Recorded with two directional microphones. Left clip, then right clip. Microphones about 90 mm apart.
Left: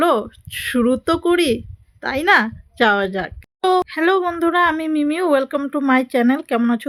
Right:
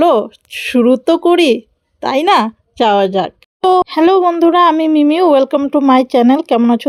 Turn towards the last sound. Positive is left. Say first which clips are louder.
# right 7 dB
turn(degrees=-25)  # may be behind; listen again after turning